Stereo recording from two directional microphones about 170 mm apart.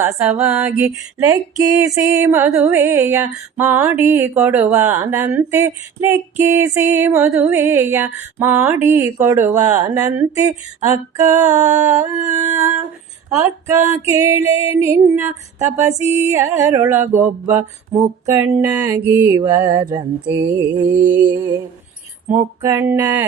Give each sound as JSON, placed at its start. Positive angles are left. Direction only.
{"t": 0.0, "sound": "music", "side_deg": -10}
{"t": 0.6, "sound": "music", "side_deg": -20}
{"t": 17.5, "sound": "a sound", "side_deg": -15}
{"t": 19.0, "sound": "music", "side_deg": -10}
{"t": 19.4, "sound": "a sound", "side_deg": -20}
{"t": 22.3, "sound": "music", "side_deg": -15}